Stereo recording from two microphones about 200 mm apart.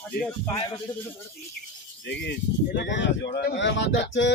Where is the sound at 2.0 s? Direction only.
60° left (ahead or behind).